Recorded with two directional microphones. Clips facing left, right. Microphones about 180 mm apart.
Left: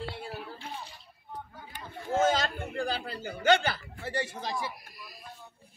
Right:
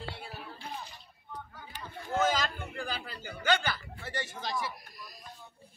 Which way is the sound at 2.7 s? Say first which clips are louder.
Left 6 dB; 40° left (ahead or behind).